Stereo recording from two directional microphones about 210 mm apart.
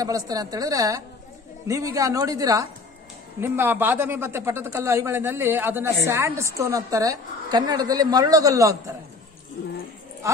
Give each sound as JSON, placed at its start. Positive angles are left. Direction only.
{"t": 0.0, "sound": "a woman's voice", "side_deg": -15}